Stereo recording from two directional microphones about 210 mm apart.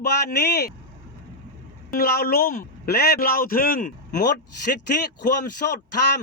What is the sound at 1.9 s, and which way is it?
A man's voice, 45° left (ahead or behind).